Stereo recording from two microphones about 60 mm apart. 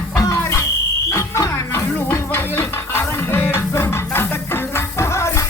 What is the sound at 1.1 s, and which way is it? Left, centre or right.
Music, left.